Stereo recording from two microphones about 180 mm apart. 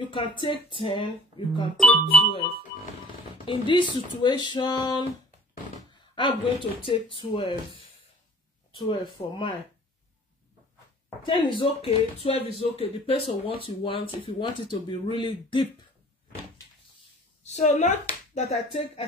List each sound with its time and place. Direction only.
0.0 s speech: 30° left (ahead or behind)
1.8 s speech: 5° left (ahead or behind)
3.4 s speech: 25° left (ahead or behind)
6.1 s speech: 30° left (ahead or behind)
8.8 s speech: 25° left (ahead or behind)
11.2 s speech: 25° left (ahead or behind)
17.4 s a woman's voice: 40° left (ahead or behind)